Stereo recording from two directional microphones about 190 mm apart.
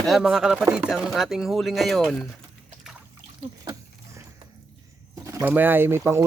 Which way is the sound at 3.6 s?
20° right (ahead or behind).